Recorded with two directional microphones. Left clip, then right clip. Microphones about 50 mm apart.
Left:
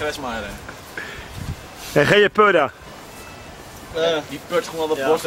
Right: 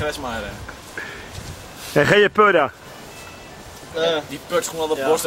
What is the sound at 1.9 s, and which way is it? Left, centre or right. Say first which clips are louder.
Speech: even; centre.